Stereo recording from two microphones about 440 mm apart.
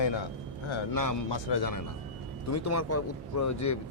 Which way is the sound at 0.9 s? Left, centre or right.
Left.